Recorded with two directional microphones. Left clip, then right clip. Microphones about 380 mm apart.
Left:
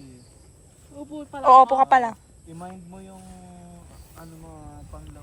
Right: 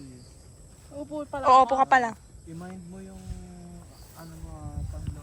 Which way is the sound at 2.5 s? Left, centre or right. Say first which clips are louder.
Left 4 dB; centre.